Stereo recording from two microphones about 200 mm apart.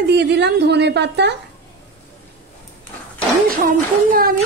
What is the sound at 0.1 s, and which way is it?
A woman's voice, 60° right (ahead or behind).